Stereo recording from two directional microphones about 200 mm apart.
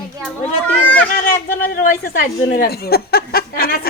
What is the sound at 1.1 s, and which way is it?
A man's voice, 45° left (ahead or behind).